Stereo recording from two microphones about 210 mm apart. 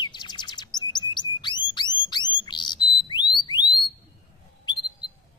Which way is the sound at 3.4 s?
20° left (ahead or behind).